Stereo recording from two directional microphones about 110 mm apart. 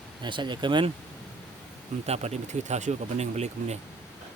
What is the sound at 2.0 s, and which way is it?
Speech, 75° right (ahead or behind).